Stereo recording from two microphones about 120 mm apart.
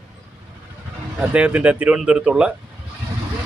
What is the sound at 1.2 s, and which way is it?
Speech, 10° right (ahead or behind).